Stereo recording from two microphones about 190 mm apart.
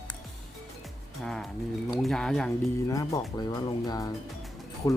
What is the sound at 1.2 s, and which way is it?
Speech, 5° left (ahead or behind).